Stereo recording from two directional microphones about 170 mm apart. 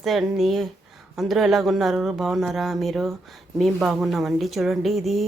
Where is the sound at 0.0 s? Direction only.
Centre (ahead or behind).